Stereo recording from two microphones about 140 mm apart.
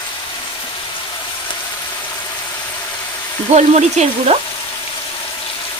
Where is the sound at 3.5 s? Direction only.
55° right (ahead or behind).